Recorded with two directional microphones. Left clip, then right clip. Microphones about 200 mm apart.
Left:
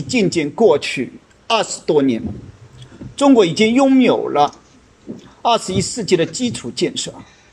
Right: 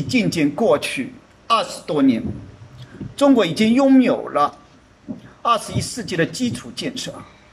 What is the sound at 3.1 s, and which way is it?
A man's voice, 15° left (ahead or behind).